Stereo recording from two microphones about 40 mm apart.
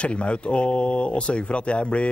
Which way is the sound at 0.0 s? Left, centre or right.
Left.